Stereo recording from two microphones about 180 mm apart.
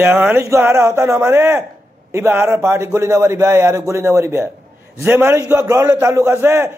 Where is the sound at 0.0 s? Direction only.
10° right (ahead or behind).